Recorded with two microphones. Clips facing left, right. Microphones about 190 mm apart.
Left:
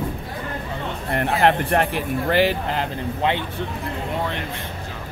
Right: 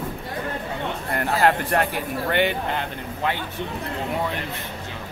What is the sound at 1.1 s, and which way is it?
Speech, 30° left (ahead or behind).